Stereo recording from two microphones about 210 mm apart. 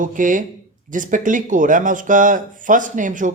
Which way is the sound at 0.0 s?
40° right (ahead or behind).